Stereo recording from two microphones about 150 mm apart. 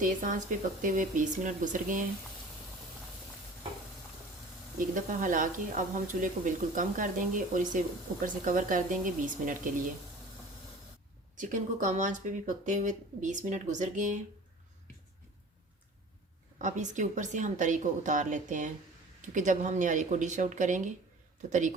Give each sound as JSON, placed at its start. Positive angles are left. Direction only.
{"t": 0.0, "sound": "speech", "side_deg": -60}
{"t": 4.9, "sound": "speech", "side_deg": -60}
{"t": 11.3, "sound": "speech", "side_deg": -55}
{"t": 16.6, "sound": "speech", "side_deg": -55}